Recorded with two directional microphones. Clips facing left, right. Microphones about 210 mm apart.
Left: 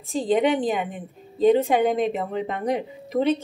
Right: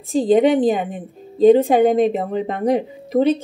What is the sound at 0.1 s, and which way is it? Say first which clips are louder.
A woman's voice: right 6 dB; 35° right (ahead or behind).